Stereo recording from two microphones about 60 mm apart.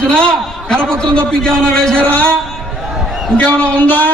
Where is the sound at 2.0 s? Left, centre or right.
Left.